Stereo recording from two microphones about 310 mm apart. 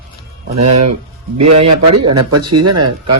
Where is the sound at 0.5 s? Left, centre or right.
Right.